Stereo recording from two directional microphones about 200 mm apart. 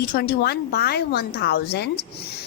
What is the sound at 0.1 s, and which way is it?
A woman's voice, 50° left (ahead or behind).